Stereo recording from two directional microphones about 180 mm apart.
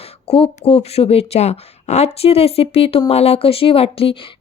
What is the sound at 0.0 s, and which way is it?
Speech, 30° left (ahead or behind).